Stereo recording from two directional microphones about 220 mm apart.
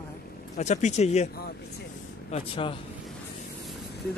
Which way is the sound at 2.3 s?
25° left (ahead or behind).